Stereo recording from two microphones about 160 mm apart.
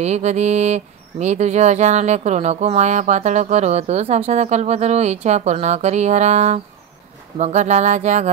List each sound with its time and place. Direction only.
0.0 s speech: 45° right (ahead or behind)